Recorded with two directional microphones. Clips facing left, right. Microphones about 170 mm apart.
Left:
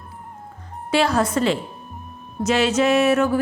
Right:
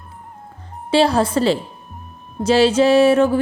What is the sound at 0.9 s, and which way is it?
A woman's voice, 30° right (ahead or behind).